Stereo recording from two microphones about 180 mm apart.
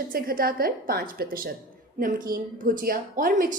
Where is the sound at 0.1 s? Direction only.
55° right (ahead or behind).